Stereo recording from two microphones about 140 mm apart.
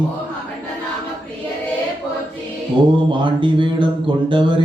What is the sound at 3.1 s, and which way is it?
Mantra, 35° right (ahead or behind).